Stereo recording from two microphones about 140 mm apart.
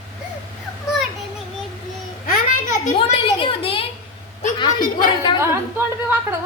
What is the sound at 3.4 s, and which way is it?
Speech, 40° left (ahead or behind).